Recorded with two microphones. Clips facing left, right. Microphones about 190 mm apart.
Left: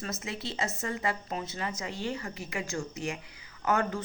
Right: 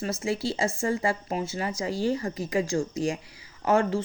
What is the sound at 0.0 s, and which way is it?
Speech, 30° right (ahead or behind).